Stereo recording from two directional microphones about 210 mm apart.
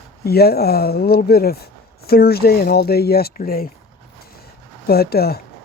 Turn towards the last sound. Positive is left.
turn(degrees=50)  # may be behind; listen again after turning